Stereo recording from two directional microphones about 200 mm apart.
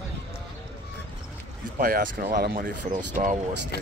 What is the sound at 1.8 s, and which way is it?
Speech, 45° right (ahead or behind).